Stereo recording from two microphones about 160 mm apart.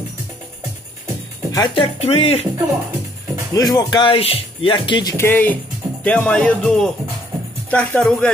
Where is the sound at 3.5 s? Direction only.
25° left (ahead or behind).